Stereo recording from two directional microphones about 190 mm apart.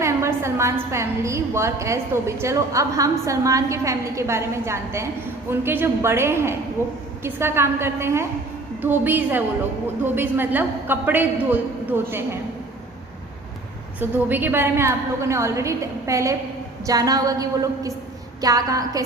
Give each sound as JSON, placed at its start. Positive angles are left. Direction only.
{"t": 0.0, "sound": "a woman's voice", "side_deg": -15}
{"t": 14.0, "sound": "a woman's voice", "side_deg": -10}